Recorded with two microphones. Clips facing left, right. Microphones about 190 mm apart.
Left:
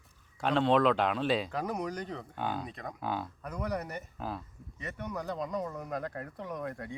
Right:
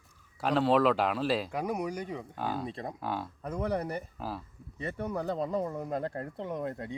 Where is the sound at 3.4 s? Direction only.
30° right (ahead or behind).